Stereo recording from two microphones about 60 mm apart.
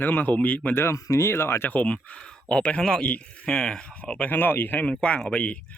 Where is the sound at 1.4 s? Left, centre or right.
Left.